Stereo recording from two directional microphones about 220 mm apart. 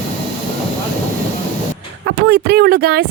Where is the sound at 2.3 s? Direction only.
45° right (ahead or behind).